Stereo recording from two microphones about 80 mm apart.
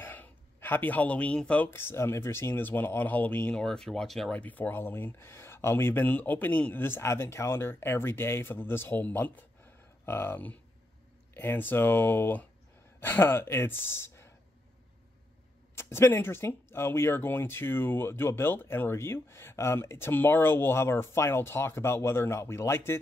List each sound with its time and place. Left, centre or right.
0.0 s a sound: left
1.7 s speech: left
3.6 s speech: centre
4.3 s speech: centre
15.7 s speech: left